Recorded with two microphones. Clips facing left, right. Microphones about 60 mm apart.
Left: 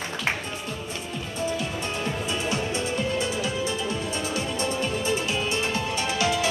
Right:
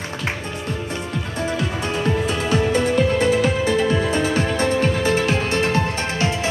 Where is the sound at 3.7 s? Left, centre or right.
Right.